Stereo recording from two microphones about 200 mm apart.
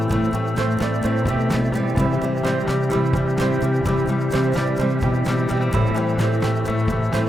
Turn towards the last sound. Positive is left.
turn(degrees=0)  # may be behind; listen again after turning